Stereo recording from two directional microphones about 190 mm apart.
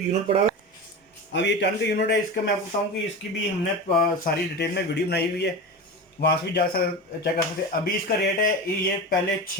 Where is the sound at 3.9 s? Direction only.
55° left (ahead or behind).